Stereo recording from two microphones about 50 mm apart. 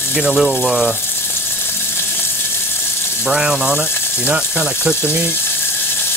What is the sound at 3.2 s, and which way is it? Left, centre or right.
Speech, centre.